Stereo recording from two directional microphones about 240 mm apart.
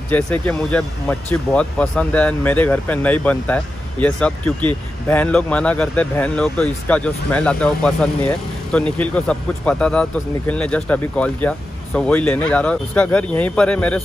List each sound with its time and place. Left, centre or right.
0.1 s speech: centre